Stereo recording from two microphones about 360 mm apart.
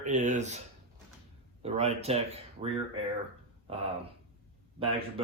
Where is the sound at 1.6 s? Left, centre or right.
Centre.